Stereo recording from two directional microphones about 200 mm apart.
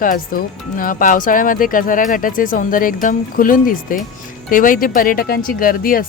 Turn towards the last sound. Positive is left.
turn(degrees=45)  # may be behind; listen again after turning